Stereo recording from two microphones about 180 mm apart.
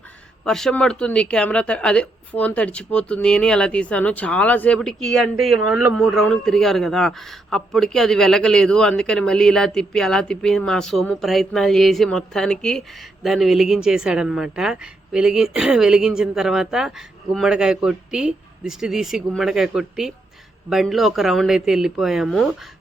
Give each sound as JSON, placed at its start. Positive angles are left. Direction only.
{"t": 0.4, "sound": "a man's voice", "side_deg": 5}